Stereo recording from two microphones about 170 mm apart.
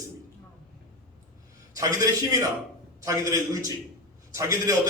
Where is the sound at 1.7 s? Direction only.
20° right (ahead or behind).